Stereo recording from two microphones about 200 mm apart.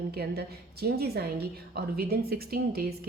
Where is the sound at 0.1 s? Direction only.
50° right (ahead or behind).